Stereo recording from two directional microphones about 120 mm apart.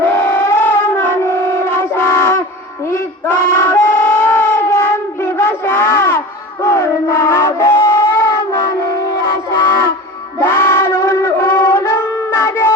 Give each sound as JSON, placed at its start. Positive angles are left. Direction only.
{"t": 0.0, "sound": "music", "side_deg": 20}
{"t": 1.2, "sound": "wind instrument", "side_deg": 20}
{"t": 2.8, "sound": "a sound", "side_deg": 25}
{"t": 8.8, "sound": "music", "side_deg": 25}
{"t": 10.4, "sound": "wind instrument", "side_deg": 20}